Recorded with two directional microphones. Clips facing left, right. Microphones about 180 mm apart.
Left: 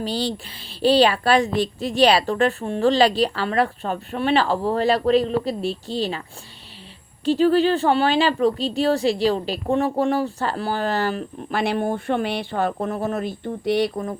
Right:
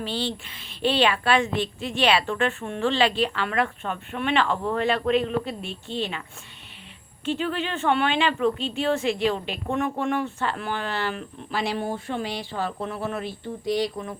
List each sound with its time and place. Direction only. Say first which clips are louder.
0.0 s a woman's voice: left 4 dB; 40° left (ahead or behind)
7.3 s a woman's voice: left 10 dB; 35° left (ahead or behind)
11.5 s speech: left 5 dB; 55° left (ahead or behind)
13.7 s speech: left 4 dB; 65° left (ahead or behind)